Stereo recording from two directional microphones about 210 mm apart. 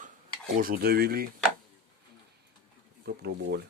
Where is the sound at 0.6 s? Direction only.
45° right (ahead or behind).